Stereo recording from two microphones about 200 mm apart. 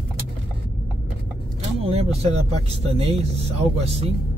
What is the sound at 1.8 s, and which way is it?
Speech, 30° right (ahead or behind).